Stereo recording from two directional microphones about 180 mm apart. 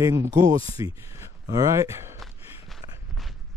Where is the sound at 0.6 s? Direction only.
30° left (ahead or behind).